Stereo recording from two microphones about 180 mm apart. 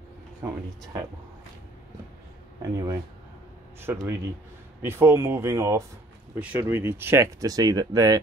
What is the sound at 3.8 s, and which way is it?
Speech, 15° right (ahead or behind).